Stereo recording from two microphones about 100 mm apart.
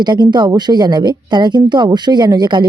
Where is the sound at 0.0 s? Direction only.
50° right (ahead or behind).